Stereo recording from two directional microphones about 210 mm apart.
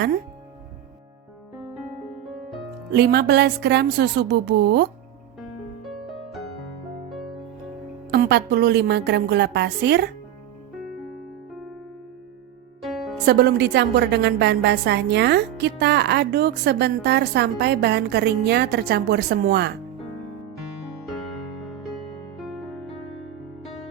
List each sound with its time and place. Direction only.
2.9 s a woman's voice: 50° right (ahead or behind)
8.1 s a woman's voice: 50° right (ahead or behind)
12.8 s music: centre (ahead or behind)
13.2 s a woman's voice: 50° right (ahead or behind)
21.6 s music: centre (ahead or behind)